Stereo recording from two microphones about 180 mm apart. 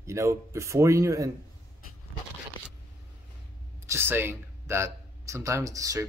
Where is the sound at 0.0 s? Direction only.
15° right (ahead or behind).